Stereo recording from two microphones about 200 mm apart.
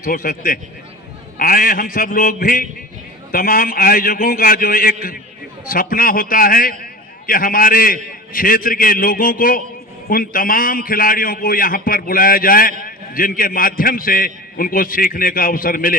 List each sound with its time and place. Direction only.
0.0 s a man's voice: 45° left (ahead or behind)